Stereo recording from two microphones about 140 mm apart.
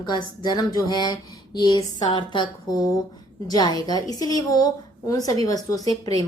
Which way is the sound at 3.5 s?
30° left (ahead or behind).